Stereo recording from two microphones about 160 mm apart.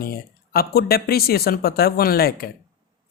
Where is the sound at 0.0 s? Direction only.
70° left (ahead or behind).